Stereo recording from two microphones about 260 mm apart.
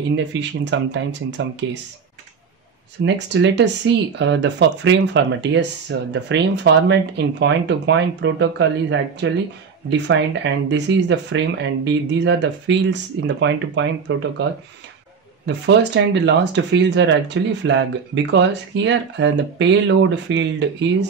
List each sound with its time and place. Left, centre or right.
0.1 s speech: right
3.0 s speech: right